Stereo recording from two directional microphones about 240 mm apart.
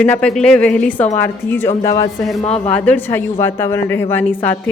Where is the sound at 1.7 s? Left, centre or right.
Left.